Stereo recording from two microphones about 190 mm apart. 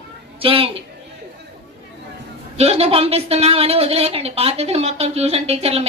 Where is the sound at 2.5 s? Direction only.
35° right (ahead or behind).